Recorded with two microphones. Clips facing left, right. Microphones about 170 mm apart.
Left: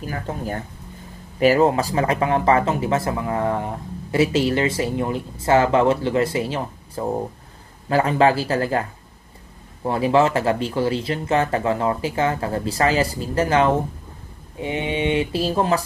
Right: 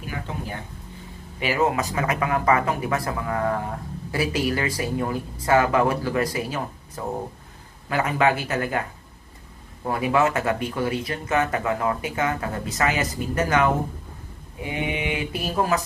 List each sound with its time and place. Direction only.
0.1 s speech: 45° left (ahead or behind)
9.8 s speech: 30° left (ahead or behind)